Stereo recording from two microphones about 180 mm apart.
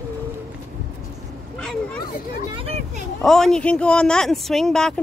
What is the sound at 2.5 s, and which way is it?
Speech, 35° right (ahead or behind).